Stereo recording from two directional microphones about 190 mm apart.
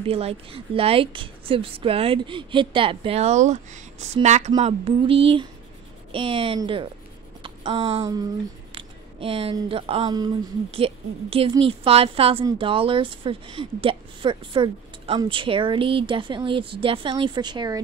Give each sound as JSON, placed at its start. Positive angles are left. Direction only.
{"t": 0.0, "sound": "speech", "side_deg": -30}
{"t": 7.4, "sound": "a sound", "side_deg": -30}
{"t": 8.0, "sound": "speech", "side_deg": -20}
{"t": 8.7, "sound": "speech", "side_deg": -30}